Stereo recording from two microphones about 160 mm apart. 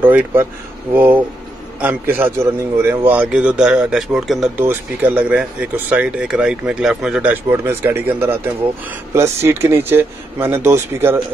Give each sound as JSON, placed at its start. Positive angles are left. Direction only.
{"t": 0.0, "sound": "a man's voice", "side_deg": -10}